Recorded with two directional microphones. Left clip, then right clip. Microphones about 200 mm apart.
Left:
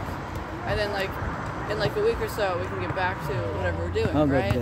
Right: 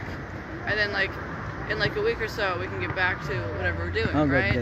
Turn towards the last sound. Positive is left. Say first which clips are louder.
# even
turn(degrees=30)  # may be behind; listen again after turning